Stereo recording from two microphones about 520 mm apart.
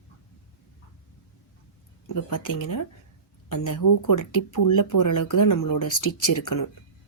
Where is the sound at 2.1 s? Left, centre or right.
Left.